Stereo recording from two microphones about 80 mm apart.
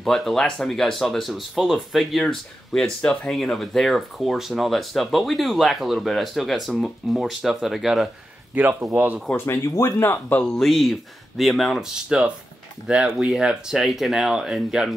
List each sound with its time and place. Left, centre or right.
0.0 s speech: centre
8.9 s speech: centre
9.5 s speech: left
10.4 s speech: centre